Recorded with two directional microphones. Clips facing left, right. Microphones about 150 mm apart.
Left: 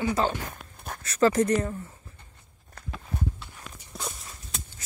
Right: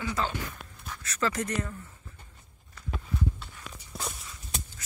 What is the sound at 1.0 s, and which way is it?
Speech, 35° left (ahead or behind).